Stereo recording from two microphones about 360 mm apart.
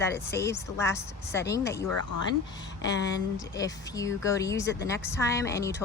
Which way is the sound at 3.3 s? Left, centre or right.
Centre.